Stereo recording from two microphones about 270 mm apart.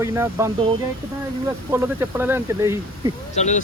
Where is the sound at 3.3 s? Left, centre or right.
Left.